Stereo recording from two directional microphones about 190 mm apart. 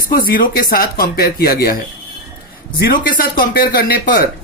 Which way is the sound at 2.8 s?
50° left (ahead or behind).